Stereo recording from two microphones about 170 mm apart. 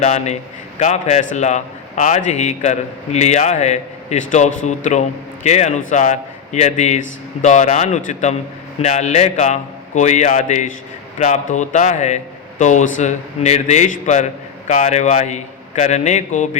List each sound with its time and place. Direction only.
0.0 s a man's voice: 45° left (ahead or behind)